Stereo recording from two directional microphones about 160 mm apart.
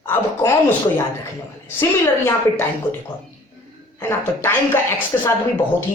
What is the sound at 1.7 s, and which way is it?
Speech, 15° left (ahead or behind).